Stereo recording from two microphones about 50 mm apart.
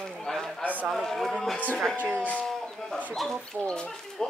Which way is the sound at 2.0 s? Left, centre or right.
Right.